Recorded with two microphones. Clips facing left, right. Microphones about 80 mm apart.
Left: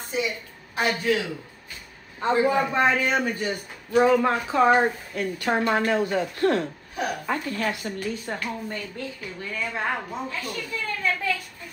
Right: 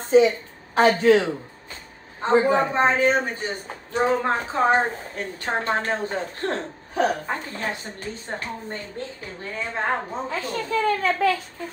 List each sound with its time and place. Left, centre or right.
0.1 s a woman's voice: right